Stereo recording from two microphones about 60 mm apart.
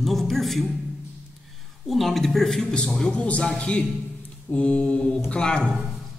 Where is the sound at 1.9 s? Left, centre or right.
Centre.